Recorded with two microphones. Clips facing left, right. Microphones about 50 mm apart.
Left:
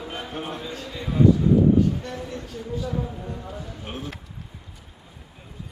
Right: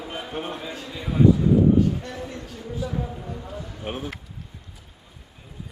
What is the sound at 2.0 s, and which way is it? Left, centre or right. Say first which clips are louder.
Speech: left 1 dB; centre.